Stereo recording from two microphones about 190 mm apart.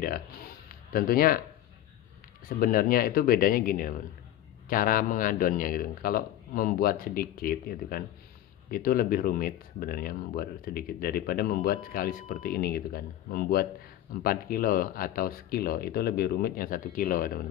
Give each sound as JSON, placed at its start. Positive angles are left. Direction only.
{"t": 0.9, "sound": "speech", "side_deg": 50}
{"t": 2.4, "sound": "speech", "side_deg": 50}